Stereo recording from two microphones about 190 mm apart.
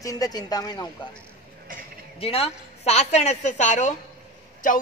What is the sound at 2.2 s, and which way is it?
A woman's voice, 30° left (ahead or behind).